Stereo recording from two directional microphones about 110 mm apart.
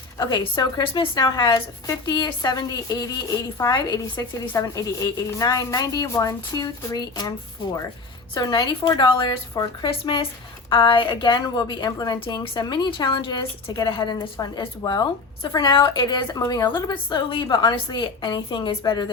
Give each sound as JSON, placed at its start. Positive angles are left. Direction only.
{"t": 0.2, "sound": "a woman's voice", "side_deg": 40}
{"t": 8.4, "sound": "a woman's voice", "side_deg": 35}
{"t": 9.0, "sound": "a woman's voice", "side_deg": 50}
{"t": 16.7, "sound": "a woman's voice", "side_deg": 45}